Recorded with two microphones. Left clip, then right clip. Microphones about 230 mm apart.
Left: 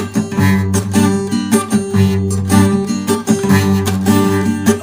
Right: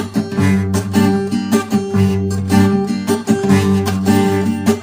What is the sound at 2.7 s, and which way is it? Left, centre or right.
Music, left.